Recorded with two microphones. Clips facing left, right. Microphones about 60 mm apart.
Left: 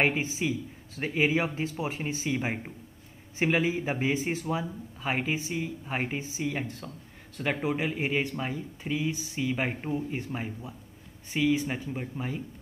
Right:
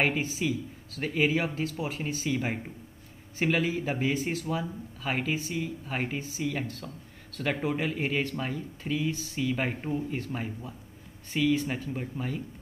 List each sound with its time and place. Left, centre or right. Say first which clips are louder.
0.0 s a man's voice: left 1 dB; left